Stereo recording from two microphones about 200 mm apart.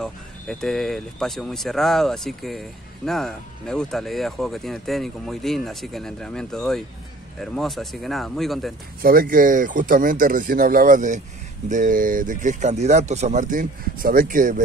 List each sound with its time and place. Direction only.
0.0 s speech: 5° left (ahead or behind)
9.0 s speech: 45° right (ahead or behind)